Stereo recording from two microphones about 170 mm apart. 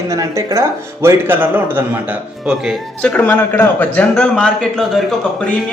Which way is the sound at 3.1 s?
10° left (ahead or behind).